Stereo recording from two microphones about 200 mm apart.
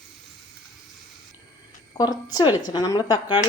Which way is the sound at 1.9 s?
20° left (ahead or behind).